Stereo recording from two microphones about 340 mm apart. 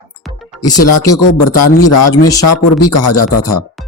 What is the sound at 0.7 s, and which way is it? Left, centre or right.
A man's voice, left.